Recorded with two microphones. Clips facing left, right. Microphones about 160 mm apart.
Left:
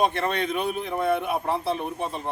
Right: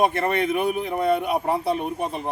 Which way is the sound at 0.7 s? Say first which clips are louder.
Right 3 dB; 15° right (ahead or behind).